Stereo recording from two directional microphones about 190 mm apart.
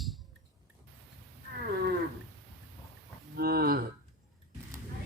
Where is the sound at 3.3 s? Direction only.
55° right (ahead or behind).